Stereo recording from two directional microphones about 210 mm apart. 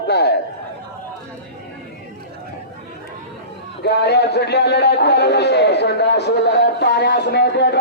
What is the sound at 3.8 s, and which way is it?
A man's voice, 50° left (ahead or behind).